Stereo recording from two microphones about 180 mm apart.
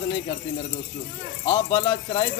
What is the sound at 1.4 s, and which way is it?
Speech, 20° left (ahead or behind).